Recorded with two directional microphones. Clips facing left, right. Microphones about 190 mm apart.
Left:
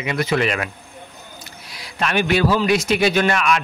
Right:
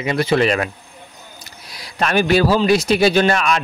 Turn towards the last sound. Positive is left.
turn(degrees=-35)  # may be behind; listen again after turning